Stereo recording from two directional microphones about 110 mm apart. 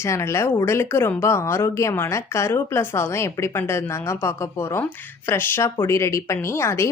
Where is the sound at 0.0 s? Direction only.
25° left (ahead or behind).